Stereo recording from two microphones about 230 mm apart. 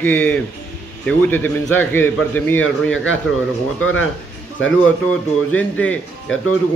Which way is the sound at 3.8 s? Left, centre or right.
Left.